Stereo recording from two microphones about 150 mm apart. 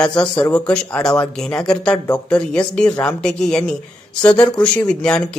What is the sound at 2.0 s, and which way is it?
Speech, 25° left (ahead or behind).